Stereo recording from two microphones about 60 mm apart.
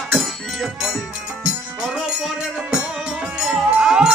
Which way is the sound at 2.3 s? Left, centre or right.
Centre.